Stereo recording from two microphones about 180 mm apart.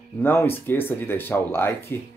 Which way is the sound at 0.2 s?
10° left (ahead or behind).